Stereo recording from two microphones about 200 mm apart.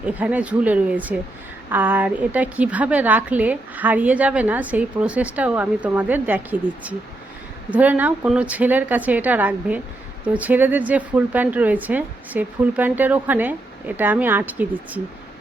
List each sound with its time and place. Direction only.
0.0 s a woman's voice: 5° right (ahead or behind)